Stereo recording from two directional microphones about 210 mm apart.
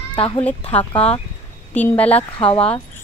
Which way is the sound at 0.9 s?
25° left (ahead or behind).